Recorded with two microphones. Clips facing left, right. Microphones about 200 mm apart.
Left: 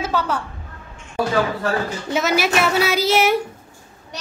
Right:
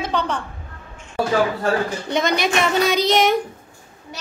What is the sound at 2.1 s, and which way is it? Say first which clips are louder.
A woman's voice: left 1 dB; 5° left (ahead or behind).